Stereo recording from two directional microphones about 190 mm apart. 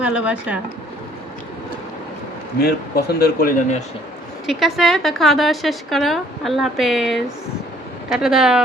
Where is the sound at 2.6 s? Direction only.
55° left (ahead or behind); by 3.8 s 40° left (ahead or behind).